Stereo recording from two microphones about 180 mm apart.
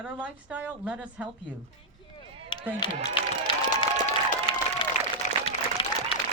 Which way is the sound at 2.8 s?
25° left (ahead or behind).